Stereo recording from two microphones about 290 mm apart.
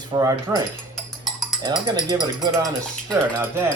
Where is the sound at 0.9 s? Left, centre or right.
Centre.